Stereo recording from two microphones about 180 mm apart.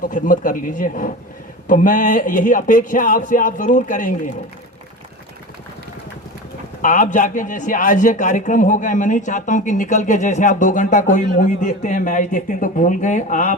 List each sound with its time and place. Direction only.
0.0 s a man's voice: 45° left (ahead or behind)
6.8 s a man's voice: 45° left (ahead or behind)